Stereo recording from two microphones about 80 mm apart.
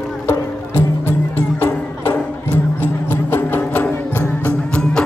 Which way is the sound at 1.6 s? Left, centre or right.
Left.